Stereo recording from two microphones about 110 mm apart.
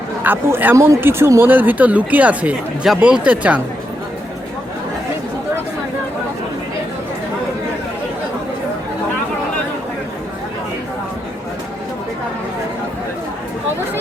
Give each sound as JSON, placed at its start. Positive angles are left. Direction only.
{"t": 0.3, "sound": "speech", "side_deg": -20}